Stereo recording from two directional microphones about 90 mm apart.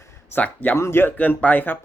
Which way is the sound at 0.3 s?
15° left (ahead or behind).